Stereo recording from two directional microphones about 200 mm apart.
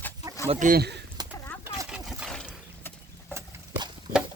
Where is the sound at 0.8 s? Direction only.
55° right (ahead or behind).